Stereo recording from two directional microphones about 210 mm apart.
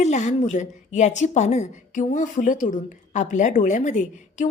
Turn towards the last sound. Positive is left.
turn(degrees=35)  # may be behind; listen again after turning